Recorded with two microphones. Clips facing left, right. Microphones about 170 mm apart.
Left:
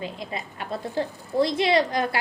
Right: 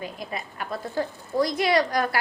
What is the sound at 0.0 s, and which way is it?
Speech, 25° left (ahead or behind).